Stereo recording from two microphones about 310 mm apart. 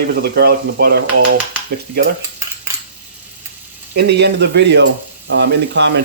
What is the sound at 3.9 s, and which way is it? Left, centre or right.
Speech, right.